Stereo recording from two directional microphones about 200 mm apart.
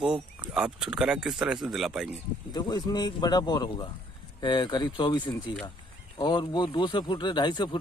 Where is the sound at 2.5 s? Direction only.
20° left (ahead or behind).